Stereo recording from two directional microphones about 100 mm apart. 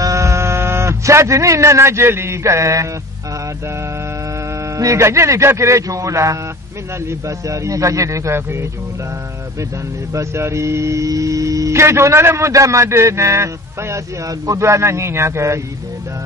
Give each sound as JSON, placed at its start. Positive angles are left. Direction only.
{"t": 0.0, "sound": "speech", "side_deg": -30}
{"t": 4.5, "sound": "speech", "side_deg": -30}
{"t": 10.1, "sound": "speech", "side_deg": -30}